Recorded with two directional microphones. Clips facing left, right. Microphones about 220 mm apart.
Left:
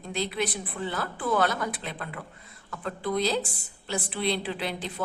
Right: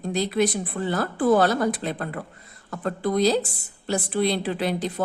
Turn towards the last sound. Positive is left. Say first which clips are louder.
# right 7 dB
turn(degrees=-40)  # may be behind; listen again after turning